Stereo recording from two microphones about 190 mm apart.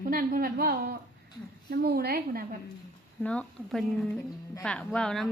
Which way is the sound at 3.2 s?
5° left (ahead or behind).